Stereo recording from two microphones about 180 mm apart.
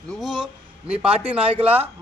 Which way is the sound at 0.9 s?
30° right (ahead or behind).